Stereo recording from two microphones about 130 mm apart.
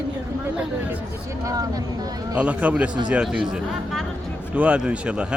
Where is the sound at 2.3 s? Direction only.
10° right (ahead or behind).